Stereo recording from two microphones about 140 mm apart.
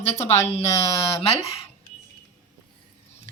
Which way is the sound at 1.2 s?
45° left (ahead or behind).